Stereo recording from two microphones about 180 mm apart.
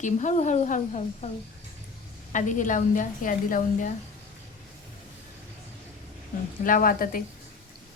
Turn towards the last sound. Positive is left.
turn(degrees=50)  # may be behind; listen again after turning